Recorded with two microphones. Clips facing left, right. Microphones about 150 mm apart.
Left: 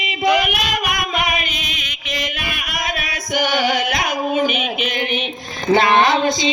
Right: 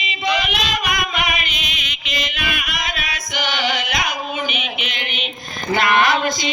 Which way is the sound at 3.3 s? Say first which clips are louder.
Left 5 dB; 45° left (ahead or behind).